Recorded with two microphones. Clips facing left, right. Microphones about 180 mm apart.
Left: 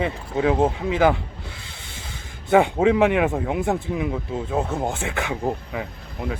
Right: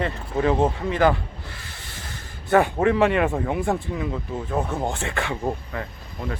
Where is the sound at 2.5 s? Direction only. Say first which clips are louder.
Left 2 dB; 15° left (ahead or behind).